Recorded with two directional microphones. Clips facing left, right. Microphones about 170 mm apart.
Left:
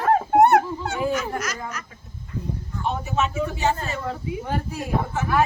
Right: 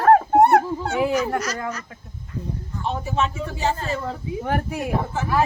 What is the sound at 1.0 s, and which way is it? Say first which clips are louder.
Speech: right 4 dB; 75° right (ahead or behind).